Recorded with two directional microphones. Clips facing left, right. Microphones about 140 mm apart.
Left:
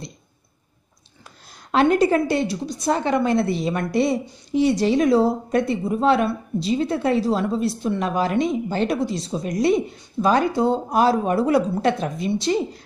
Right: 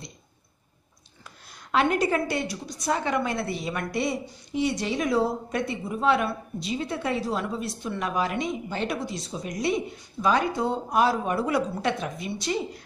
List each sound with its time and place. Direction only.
1.7 s a woman's voice: 30° left (ahead or behind)